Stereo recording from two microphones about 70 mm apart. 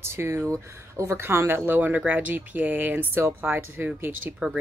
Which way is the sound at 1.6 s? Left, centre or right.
Right.